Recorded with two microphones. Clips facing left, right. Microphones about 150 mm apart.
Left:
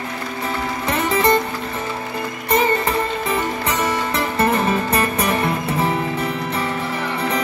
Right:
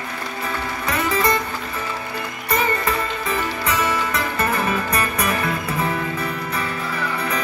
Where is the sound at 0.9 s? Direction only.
30° left (ahead or behind).